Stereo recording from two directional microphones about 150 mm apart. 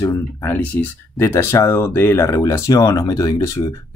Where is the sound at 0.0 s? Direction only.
15° left (ahead or behind).